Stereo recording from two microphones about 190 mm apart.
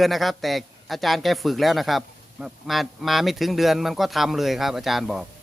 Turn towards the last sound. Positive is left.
turn(degrees=0)  # may be behind; listen again after turning